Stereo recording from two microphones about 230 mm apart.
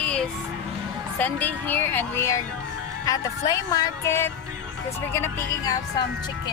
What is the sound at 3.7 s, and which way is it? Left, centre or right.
Speech, centre.